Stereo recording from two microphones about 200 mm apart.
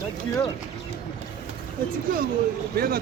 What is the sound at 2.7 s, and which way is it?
Speech, 50° right (ahead or behind).